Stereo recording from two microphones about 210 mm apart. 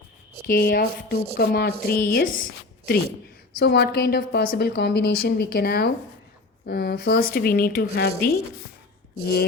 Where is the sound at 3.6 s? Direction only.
50° left (ahead or behind).